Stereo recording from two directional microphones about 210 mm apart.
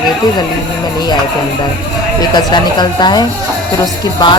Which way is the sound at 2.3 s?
20° left (ahead or behind).